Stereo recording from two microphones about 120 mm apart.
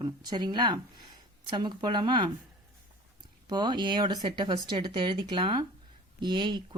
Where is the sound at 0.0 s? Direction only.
35° right (ahead or behind).